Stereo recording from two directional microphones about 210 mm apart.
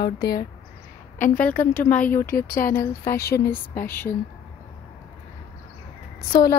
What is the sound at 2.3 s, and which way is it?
Speech, 45° left (ahead or behind).